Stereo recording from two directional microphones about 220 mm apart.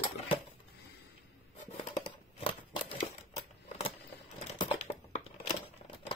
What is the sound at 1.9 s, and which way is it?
Crumpling, 25° left (ahead or behind).